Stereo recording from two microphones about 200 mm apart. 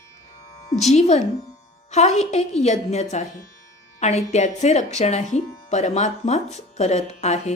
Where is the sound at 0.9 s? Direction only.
35° left (ahead or behind).